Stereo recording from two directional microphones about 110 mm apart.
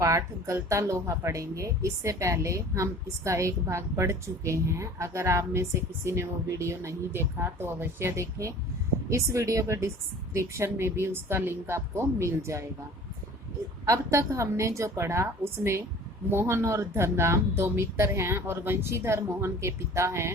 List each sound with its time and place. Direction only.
0.0 s speech: 30° right (ahead or behind)
13.8 s speech: 30° right (ahead or behind)